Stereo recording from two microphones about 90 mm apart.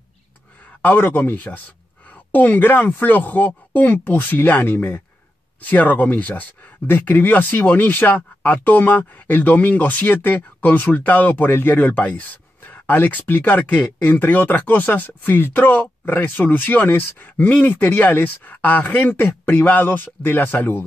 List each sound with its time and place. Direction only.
0.8 s speech: 20° left (ahead or behind)